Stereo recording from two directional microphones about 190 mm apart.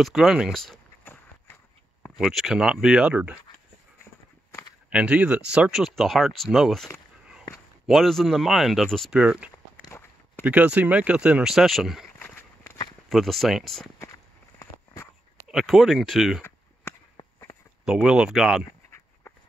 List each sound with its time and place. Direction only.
0.0 s speech: centre (ahead or behind)
4.8 s speech: 5° right (ahead or behind)
9.8 s walk: 15° left (ahead or behind)
10.4 s speech: 10° right (ahead or behind)
12.2 s walk: 10° left (ahead or behind)
13.1 s speech: centre (ahead or behind)
13.9 s a sound: 15° left (ahead or behind)
15.4 s speech: centre (ahead or behind)
17.2 s a sound: 25° left (ahead or behind)
17.8 s speech: 5° right (ahead or behind)